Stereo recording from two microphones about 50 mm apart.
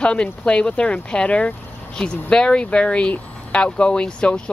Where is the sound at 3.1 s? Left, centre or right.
Left.